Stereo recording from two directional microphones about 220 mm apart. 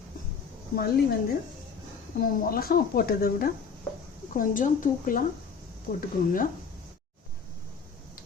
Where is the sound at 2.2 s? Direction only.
40° left (ahead or behind).